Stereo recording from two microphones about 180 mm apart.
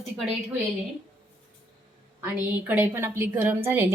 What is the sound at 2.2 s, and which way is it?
A woman's voice, 10° right (ahead or behind).